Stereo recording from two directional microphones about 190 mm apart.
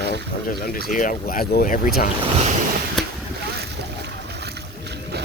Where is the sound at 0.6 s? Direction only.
45° left (ahead or behind).